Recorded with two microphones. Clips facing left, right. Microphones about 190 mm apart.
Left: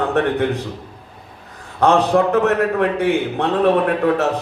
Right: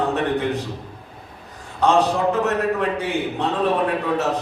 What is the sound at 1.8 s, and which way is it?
A man's voice, 55° left (ahead or behind).